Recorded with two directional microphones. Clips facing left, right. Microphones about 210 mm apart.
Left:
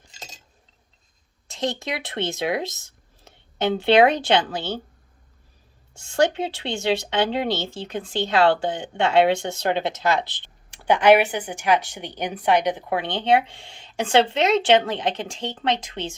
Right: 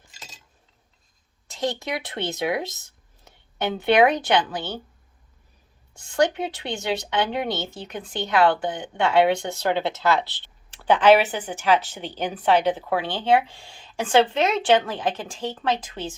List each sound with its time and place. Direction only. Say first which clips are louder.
1.5 s speech: even; 25° left (ahead or behind)
5.9 s speech: left 1 dB; 25° left (ahead or behind)